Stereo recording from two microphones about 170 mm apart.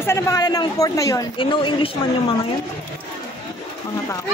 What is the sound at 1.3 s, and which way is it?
Speech, 30° left (ahead or behind).